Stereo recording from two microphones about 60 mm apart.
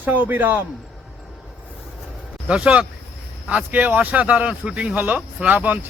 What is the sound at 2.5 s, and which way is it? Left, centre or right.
Speech, centre.